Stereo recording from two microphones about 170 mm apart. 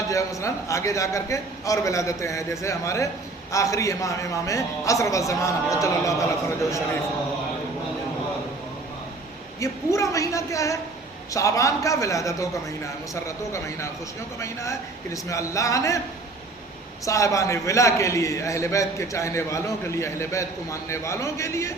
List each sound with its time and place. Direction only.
0.1 s a man's voice: 20° left (ahead or behind)
9.6 s a man's voice: 20° left (ahead or behind)
17.1 s a man's voice: 20° left (ahead or behind)